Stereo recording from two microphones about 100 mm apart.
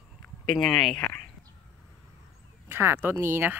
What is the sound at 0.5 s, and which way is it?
Speech, 5° left (ahead or behind).